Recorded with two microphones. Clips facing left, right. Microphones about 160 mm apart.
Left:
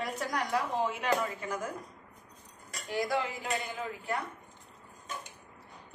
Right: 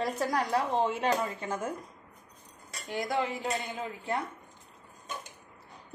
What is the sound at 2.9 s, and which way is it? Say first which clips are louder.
A woman's voice: right 1 dB; 20° right (ahead or behind).